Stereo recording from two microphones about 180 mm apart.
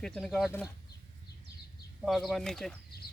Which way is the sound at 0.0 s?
5° left (ahead or behind).